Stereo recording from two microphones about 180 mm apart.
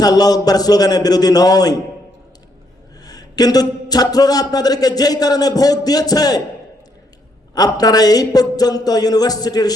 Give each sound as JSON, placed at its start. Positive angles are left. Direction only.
{"t": 0.0, "sound": "a man's voice", "side_deg": 20}
{"t": 3.0, "sound": "a man's voice", "side_deg": 20}
{"t": 7.5, "sound": "a man's voice", "side_deg": 20}